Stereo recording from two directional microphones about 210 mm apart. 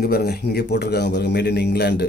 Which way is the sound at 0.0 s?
50° left (ahead or behind).